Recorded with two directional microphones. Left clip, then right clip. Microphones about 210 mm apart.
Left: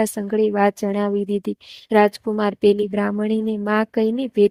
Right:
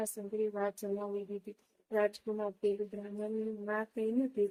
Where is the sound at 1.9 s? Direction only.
45° left (ahead or behind).